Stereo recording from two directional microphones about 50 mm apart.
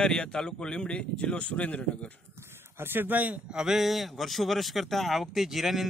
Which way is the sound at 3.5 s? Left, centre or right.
Centre.